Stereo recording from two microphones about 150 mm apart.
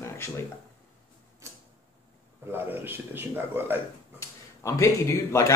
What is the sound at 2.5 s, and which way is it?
A man's voice, 15° right (ahead or behind).